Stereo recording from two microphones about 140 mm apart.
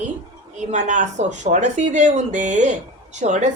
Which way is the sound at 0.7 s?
60° right (ahead or behind).